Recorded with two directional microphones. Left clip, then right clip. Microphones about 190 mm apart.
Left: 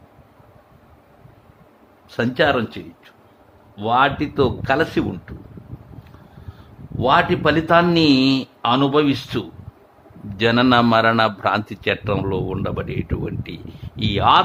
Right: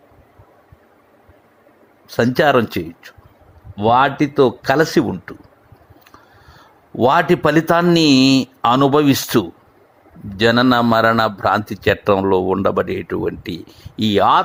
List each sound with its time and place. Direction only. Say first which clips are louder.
2.0 s speech: right 4 dB; 30° right (ahead or behind)
7.0 s speech: right 3 dB; 35° right (ahead or behind)
10.3 s speech: right 2 dB; 20° right (ahead or behind)